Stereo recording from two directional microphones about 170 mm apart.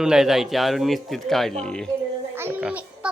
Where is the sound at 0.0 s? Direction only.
5° right (ahead or behind).